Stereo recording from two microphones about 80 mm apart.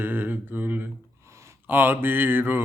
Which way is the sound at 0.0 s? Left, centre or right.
Right.